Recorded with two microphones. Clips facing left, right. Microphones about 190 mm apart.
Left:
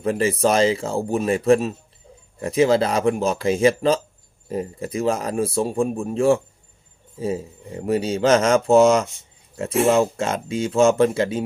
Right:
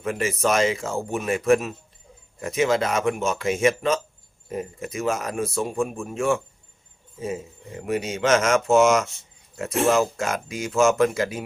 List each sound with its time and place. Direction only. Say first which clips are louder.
0.0 s speech: left 5 dB; 30° left (ahead or behind)